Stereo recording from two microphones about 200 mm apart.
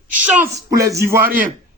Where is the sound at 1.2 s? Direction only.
45° right (ahead or behind).